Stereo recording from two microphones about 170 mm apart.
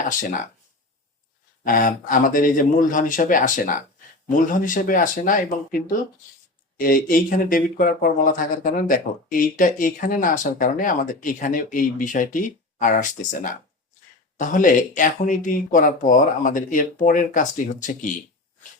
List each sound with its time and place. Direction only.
0.1 s speech: 55° left (ahead or behind)
1.6 s speech: 50° left (ahead or behind)